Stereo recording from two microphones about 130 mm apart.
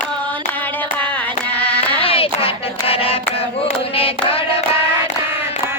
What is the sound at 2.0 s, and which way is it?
Hands, 45° left (ahead or behind).